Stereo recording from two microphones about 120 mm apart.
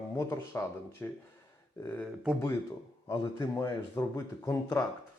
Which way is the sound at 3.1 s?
25° left (ahead or behind).